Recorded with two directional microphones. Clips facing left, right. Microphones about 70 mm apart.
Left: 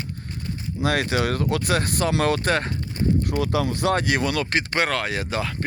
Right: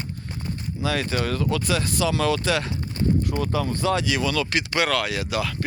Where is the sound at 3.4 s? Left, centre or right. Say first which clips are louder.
Left 2 dB; left.